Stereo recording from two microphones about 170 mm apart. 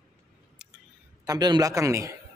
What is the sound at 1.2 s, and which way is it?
Speech, 25° right (ahead or behind).